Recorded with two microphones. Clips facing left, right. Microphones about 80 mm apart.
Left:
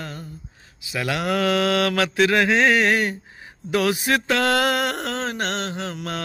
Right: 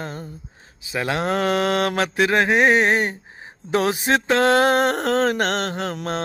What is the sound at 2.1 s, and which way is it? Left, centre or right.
Speech, right.